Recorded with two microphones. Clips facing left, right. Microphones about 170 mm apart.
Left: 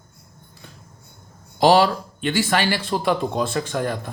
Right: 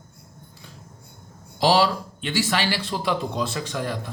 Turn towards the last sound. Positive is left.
turn(degrees=50)  # may be behind; listen again after turning